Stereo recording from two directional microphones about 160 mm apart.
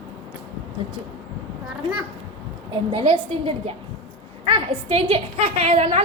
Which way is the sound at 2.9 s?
35° right (ahead or behind).